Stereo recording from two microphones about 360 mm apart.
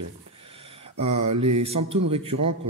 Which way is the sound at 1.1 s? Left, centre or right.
Right.